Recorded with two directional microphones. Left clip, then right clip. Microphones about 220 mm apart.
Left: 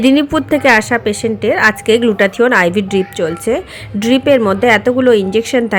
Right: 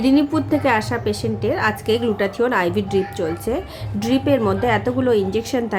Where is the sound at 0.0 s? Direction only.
25° left (ahead or behind).